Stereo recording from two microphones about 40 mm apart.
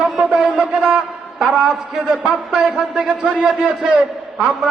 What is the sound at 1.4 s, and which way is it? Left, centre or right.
A man's voice, centre.